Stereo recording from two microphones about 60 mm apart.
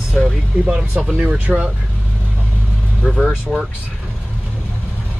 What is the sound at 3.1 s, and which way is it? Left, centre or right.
Speech, centre.